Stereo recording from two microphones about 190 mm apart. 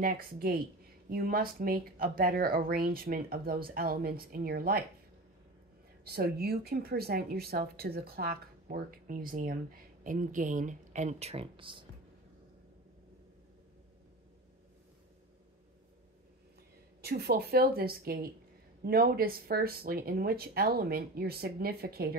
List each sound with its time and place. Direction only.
0.0 s speech: 50° right (ahead or behind)
6.0 s speech: 55° right (ahead or behind); by 11.8 s 25° right (ahead or behind)
17.0 s speech: 55° right (ahead or behind)